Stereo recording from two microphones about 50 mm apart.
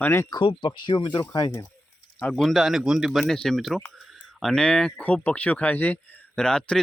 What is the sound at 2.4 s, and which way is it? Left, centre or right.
Speech, centre.